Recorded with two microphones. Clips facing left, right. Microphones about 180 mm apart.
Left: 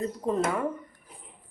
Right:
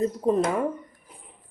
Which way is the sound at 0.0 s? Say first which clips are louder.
Right 5 dB; 20° right (ahead or behind).